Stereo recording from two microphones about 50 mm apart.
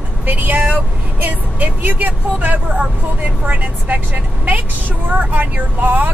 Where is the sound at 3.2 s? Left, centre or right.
Right.